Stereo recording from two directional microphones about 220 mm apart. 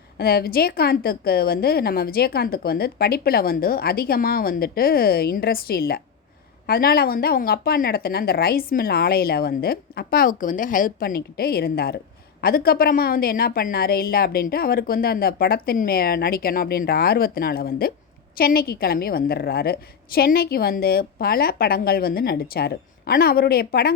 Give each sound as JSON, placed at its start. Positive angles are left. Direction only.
{"t": 0.2, "sound": "a woman's voice", "side_deg": 45}